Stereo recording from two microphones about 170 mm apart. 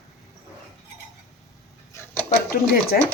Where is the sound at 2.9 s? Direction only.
65° left (ahead or behind).